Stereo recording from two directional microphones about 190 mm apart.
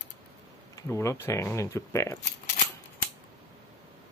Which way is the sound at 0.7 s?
15° left (ahead or behind).